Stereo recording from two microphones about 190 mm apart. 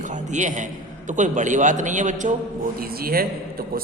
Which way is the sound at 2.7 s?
50° right (ahead or behind).